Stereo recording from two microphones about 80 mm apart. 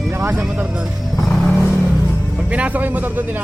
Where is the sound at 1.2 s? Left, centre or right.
Centre.